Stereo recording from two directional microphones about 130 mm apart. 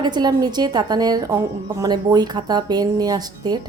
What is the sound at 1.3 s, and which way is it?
Speech, 20° right (ahead or behind).